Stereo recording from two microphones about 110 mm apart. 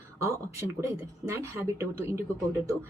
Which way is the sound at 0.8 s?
25° right (ahead or behind).